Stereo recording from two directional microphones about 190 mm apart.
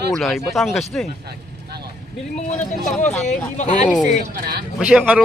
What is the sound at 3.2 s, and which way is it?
Speech, 40° left (ahead or behind).